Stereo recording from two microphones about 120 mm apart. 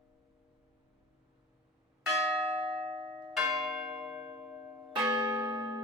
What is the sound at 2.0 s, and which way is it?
Church bell, centre (ahead or behind).